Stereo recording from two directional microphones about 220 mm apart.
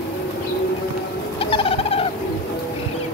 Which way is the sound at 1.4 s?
25° left (ahead or behind).